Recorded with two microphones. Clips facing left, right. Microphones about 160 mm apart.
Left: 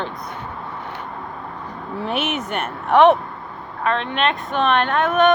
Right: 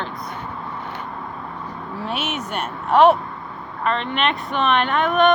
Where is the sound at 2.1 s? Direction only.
55° left (ahead or behind).